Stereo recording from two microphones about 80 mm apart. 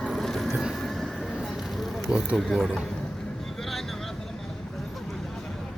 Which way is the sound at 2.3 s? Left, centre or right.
Centre.